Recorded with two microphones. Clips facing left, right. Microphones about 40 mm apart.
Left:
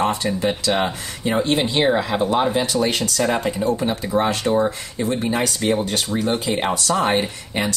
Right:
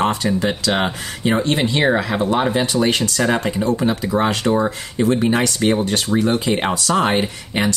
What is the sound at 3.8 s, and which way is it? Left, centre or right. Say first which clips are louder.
Speech: right 2 dB; right.